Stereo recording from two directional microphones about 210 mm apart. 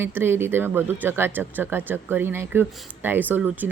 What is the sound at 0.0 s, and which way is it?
Speech, 10° right (ahead or behind).